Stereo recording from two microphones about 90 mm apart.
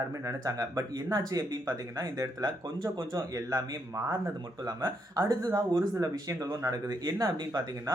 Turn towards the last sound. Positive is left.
turn(degrees=-50)  # may be behind; listen again after turning